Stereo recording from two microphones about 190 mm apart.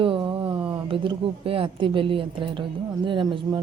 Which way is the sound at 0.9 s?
25° right (ahead or behind).